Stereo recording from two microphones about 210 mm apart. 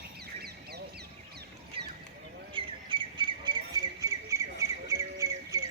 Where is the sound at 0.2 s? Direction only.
50° right (ahead or behind).